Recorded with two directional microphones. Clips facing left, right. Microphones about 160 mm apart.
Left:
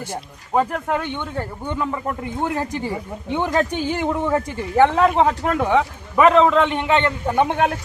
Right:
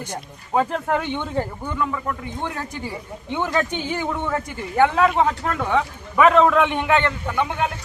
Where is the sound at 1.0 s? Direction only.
15° right (ahead or behind).